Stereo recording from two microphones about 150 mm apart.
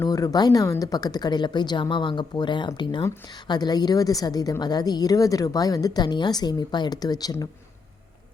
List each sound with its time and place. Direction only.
0.0 s a woman's voice: 25° left (ahead or behind)